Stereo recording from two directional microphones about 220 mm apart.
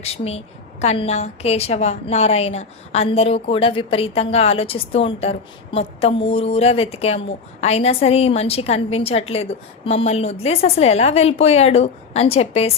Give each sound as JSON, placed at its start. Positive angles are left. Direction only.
{"t": 0.0, "sound": "a woman's voice", "side_deg": 30}